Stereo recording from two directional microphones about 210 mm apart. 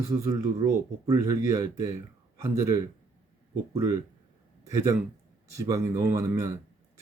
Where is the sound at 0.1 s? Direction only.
15° right (ahead or behind).